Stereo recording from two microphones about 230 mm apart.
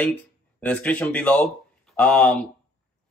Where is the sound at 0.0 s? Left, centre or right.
Centre.